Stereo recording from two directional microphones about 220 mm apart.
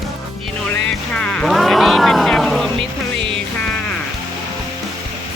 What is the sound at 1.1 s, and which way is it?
Speech, 5° left (ahead or behind).